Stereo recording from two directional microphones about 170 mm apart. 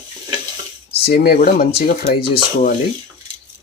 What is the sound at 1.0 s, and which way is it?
Speech, 65° left (ahead or behind).